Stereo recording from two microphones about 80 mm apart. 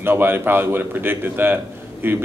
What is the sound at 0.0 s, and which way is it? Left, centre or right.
A man's voice, right.